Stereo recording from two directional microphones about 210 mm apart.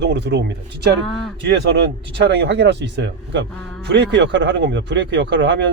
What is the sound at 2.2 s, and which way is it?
A man's voice, 55° right (ahead or behind).